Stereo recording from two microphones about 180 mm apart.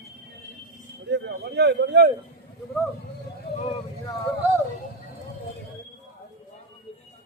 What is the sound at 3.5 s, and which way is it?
Vehicle, 65° left (ahead or behind).